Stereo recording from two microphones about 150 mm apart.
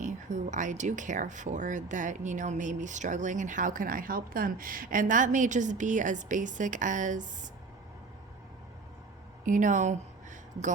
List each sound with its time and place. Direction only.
0.0 s speech: 55° right (ahead or behind)
9.5 s speech: 55° right (ahead or behind)